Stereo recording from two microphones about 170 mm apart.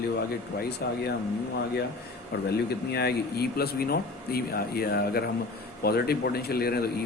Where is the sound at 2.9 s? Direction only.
65° left (ahead or behind).